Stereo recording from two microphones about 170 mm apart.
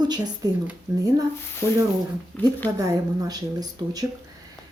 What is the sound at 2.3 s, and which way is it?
Speech, 5° left (ahead or behind).